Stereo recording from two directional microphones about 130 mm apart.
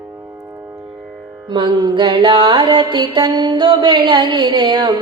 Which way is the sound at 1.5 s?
35° right (ahead or behind).